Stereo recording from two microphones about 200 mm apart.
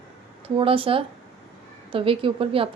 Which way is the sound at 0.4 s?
25° right (ahead or behind).